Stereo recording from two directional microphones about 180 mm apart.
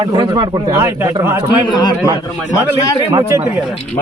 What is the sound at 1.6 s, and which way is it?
Speech, 25° left (ahead or behind).